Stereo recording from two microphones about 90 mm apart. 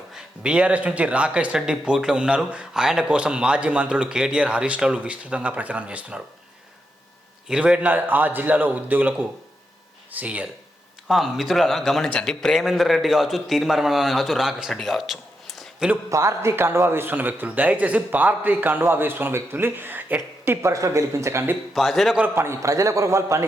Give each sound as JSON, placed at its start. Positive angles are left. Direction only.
{"t": 0.1, "sound": "speech", "side_deg": -10}
{"t": 7.4, "sound": "a man's voice", "side_deg": -10}
{"t": 11.1, "sound": "a man's voice", "side_deg": 0}
{"t": 16.0, "sound": "a man's voice", "side_deg": -35}
{"t": 21.8, "sound": "a man's voice", "side_deg": 0}
{"t": 22.4, "sound": "a man's voice", "side_deg": -30}